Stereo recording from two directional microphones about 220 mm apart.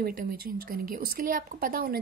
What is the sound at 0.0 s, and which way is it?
Speech, 40° right (ahead or behind).